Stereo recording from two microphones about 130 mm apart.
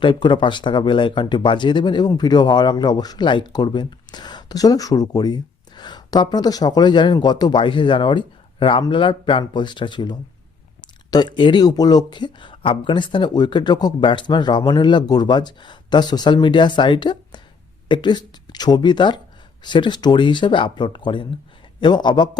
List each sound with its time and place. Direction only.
0.0 s speech: 35° left (ahead or behind)